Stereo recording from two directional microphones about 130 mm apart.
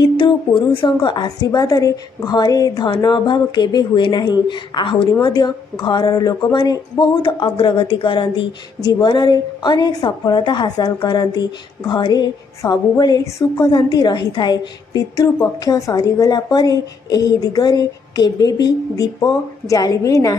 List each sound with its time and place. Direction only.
0.0 s a woman's voice: 40° left (ahead or behind)